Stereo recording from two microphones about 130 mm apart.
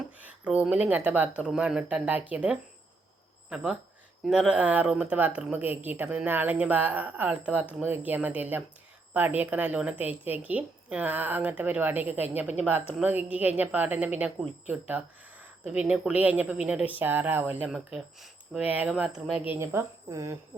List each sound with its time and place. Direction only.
0.4 s a woman's voice: 10° right (ahead or behind)
17.7 s speech: 5° right (ahead or behind)
19.5 s speech: 25° right (ahead or behind)